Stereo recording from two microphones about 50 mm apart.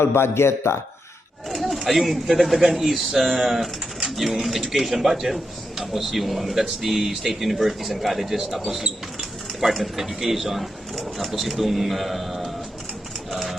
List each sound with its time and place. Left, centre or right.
0.0 s a man's voice: left
1.6 s speech: centre
13.3 s clip-clop: centre